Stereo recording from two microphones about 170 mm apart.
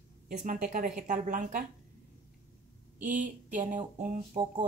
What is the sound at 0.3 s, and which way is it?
A woman's voice, 45° right (ahead or behind).